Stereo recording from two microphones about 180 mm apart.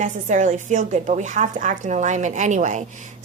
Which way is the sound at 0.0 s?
45° right (ahead or behind).